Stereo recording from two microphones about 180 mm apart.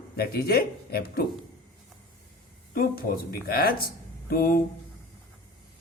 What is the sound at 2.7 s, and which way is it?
Speech, 55° left (ahead or behind).